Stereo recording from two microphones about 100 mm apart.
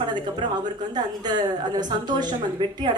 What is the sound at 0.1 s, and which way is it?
A woman's voice, 45° right (ahead or behind).